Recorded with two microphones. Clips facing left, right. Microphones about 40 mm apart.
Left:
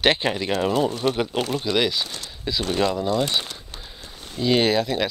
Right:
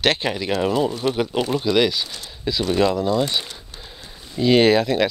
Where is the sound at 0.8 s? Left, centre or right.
Left.